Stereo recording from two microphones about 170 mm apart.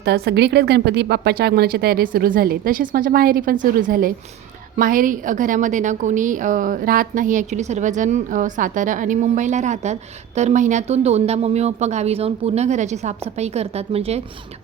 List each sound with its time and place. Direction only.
0.0 s a woman's voice: 80° right; by 14.2 s 35° right (ahead or behind)